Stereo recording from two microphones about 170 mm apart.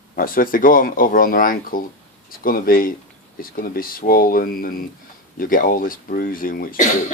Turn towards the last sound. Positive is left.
turn(degrees=55)  # may be behind; listen again after turning